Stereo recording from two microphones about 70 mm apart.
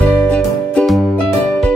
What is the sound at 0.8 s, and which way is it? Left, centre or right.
Music, centre.